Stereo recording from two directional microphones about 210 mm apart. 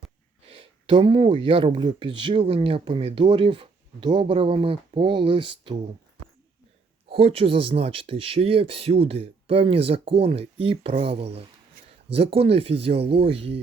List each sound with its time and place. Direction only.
0.4 s speech: 25° right (ahead or behind)
7.1 s speech: 25° right (ahead or behind)